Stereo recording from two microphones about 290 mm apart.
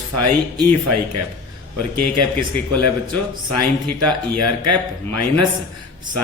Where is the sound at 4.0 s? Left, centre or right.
Right.